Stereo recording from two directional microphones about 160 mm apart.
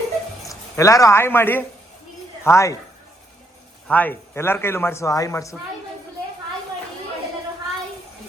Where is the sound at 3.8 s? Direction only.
10° left (ahead or behind).